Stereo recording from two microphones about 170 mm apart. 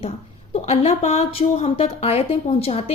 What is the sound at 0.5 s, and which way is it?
A woman's voice, 40° left (ahead or behind).